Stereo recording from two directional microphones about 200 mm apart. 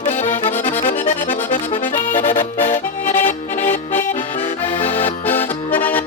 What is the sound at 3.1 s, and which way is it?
Accordion, 10° left (ahead or behind).